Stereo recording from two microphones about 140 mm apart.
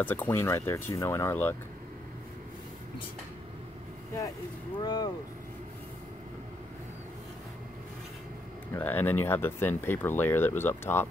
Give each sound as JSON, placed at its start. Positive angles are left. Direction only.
{"t": 0.0, "sound": "speech", "side_deg": 15}
{"t": 4.7, "sound": "speech", "side_deg": 30}
{"t": 8.7, "sound": "speech", "side_deg": 15}